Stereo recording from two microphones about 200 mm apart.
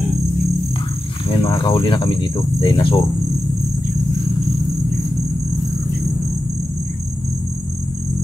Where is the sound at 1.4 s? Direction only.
15° left (ahead or behind).